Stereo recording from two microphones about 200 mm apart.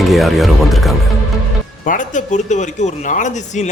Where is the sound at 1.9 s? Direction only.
40° left (ahead or behind).